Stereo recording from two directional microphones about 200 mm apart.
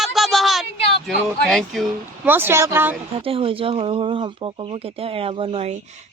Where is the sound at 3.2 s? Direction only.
30° right (ahead or behind).